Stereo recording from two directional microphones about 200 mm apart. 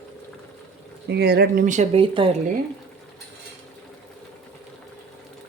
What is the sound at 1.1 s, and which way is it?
Speech, 55° right (ahead or behind).